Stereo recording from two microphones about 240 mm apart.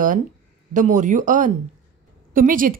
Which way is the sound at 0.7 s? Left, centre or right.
Right.